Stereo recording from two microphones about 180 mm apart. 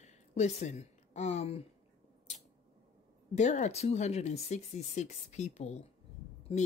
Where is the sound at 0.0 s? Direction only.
40° left (ahead or behind).